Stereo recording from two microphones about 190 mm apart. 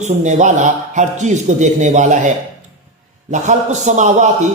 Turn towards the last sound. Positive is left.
turn(degrees=-40)  # may be behind; listen again after turning